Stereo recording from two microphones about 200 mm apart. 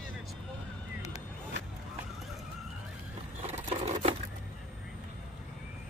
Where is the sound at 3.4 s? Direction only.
30° right (ahead or behind).